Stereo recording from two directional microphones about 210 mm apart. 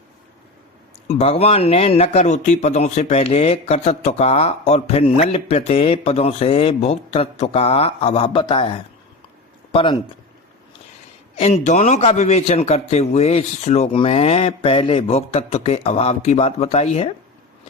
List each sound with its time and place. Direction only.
1.0 s speech: 30° left (ahead or behind)
11.3 s a man's voice: 30° left (ahead or behind)